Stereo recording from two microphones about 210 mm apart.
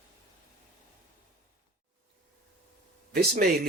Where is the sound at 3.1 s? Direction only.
45° right (ahead or behind).